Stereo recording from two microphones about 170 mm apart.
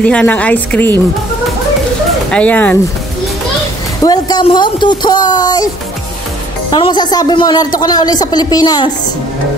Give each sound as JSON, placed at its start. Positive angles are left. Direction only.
{"t": 0.0, "sound": "a woman's voice", "side_deg": 10}
{"t": 2.3, "sound": "a woman's voice", "side_deg": 10}
{"t": 4.0, "sound": "a sound", "side_deg": 25}
{"t": 4.5, "sound": "speech", "side_deg": 25}
{"t": 6.7, "sound": "speech", "side_deg": 25}